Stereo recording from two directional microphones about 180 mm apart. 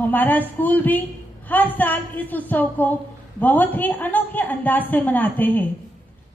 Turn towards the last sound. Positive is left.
turn(degrees=10)  # may be behind; listen again after turning